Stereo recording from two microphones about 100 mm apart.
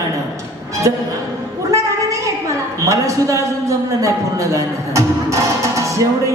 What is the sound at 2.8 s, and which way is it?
A man's voice, 30° right (ahead or behind).